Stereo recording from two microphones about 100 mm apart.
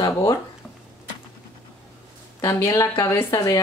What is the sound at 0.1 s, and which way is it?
Speech, 30° left (ahead or behind).